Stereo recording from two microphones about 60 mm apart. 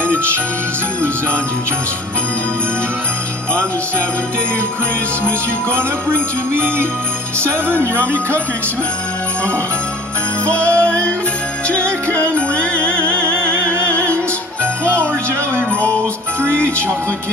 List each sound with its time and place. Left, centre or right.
5.2 s jingle bell: right
7.8 s jingle bell: right
10.4 s music: left
13.2 s music: right